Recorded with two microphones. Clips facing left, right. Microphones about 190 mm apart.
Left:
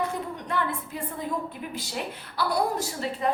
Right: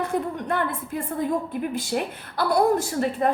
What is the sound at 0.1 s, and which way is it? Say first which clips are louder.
A woman's voice: right 5 dB; 55° right (ahead or behind).